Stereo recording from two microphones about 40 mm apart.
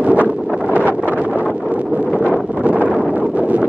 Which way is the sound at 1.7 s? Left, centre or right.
Right.